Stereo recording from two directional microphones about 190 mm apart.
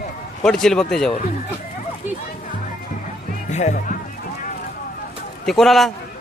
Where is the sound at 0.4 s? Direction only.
5° left (ahead or behind).